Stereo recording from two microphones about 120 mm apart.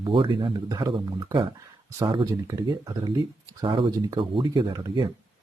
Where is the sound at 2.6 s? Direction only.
35° right (ahead or behind).